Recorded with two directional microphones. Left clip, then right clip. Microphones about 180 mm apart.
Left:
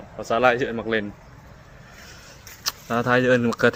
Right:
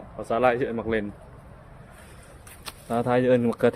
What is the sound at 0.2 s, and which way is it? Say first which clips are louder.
Speech: left 3 dB; centre (ahead or behind).